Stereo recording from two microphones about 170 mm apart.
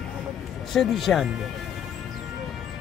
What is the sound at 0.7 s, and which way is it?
Speech, centre (ahead or behind).